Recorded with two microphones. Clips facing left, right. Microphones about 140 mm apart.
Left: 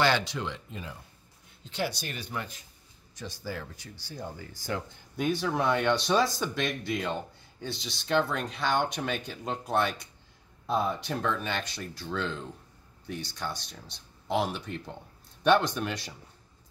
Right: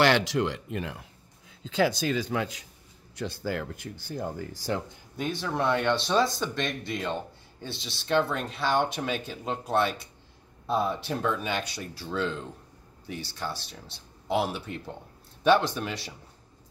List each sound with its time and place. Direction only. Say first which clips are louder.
0.0 s speech: right 4 dB; 80° right
2.1 s speech: right 8 dB; 90° right
3.2 s speech: right 6 dB; 65° right (ahead or behind); by 4.6 s 45° right (ahead or behind)
5.1 s speech: left 2 dB; centre (ahead or behind)